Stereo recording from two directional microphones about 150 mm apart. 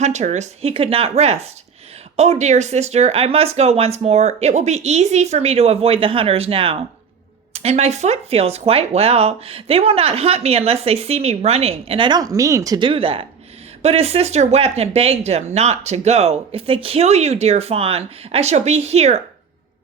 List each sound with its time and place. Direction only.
0.0 s speech: 50° right (ahead or behind)